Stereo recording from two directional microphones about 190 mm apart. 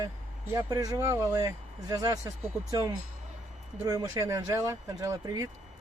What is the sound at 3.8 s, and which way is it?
Speech, 20° right (ahead or behind).